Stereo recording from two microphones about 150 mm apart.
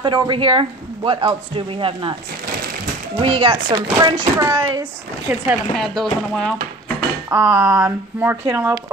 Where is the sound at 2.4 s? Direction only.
75° right (ahead or behind).